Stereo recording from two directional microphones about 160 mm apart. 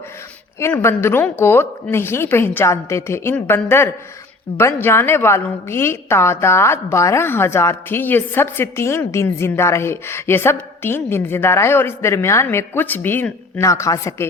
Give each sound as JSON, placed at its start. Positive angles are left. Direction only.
{"t": 0.6, "sound": "a woman's voice", "side_deg": 15}